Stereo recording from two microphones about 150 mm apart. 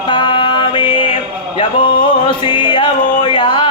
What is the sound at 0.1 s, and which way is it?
Mantra, 35° left (ahead or behind).